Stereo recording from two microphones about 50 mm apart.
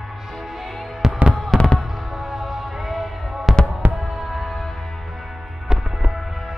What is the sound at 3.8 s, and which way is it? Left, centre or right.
Music, right.